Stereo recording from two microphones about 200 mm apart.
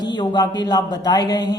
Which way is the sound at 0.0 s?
20° left (ahead or behind).